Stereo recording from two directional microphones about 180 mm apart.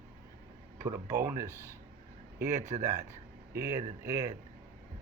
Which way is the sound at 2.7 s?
40° right (ahead or behind).